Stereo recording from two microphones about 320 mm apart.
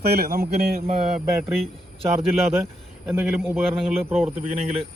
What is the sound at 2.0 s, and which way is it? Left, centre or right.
Speech, centre.